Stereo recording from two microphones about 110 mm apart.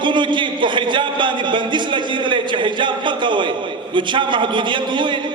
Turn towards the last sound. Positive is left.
turn(degrees=-45)  # may be behind; listen again after turning